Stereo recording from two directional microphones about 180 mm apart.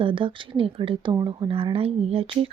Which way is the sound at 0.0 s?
30° right (ahead or behind).